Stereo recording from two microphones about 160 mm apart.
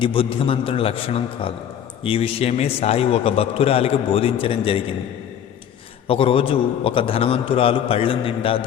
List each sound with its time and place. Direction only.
0.0 s a man's voice: 35° left (ahead or behind)
6.1 s a man's voice: 35° left (ahead or behind)